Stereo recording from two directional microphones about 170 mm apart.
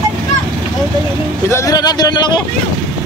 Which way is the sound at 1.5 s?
20° left (ahead or behind).